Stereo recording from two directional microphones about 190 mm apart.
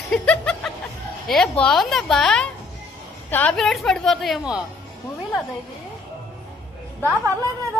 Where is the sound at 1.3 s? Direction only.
5° left (ahead or behind).